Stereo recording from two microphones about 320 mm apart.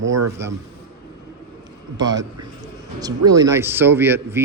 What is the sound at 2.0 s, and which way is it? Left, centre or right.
Speech, centre.